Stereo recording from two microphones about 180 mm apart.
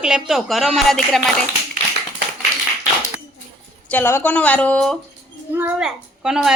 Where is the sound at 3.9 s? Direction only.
10° left (ahead or behind).